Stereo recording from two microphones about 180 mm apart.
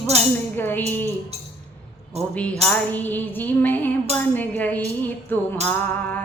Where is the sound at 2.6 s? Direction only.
10° left (ahead or behind).